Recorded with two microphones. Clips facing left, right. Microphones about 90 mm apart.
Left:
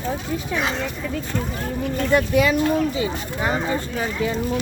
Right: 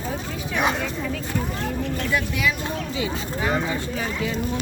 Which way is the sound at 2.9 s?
35° left (ahead or behind).